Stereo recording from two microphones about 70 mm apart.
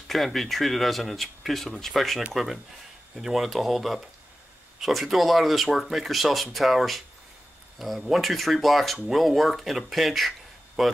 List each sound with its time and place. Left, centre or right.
0.1 s speech: centre